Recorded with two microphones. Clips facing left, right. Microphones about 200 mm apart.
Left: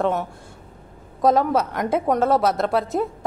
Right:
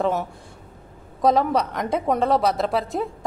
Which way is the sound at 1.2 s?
Centre (ahead or behind).